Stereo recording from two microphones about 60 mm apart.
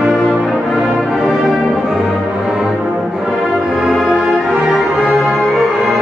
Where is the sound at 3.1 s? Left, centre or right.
Centre.